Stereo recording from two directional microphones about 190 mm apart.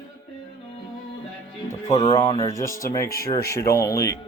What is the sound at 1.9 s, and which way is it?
Speech, 35° left (ahead or behind).